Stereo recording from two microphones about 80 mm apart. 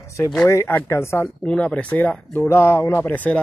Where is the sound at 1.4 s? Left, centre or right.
Centre.